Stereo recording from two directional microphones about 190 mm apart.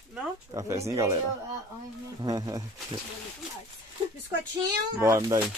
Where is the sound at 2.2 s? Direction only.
20° right (ahead or behind).